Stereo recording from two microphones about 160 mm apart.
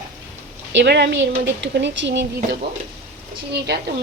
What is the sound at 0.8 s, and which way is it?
A woman's voice, 90° right.